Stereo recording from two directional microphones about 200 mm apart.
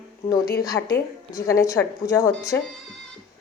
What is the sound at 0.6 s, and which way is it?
A woman's voice, 20° left (ahead or behind).